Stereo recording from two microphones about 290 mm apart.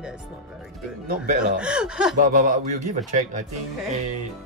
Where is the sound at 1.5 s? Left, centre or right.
Centre.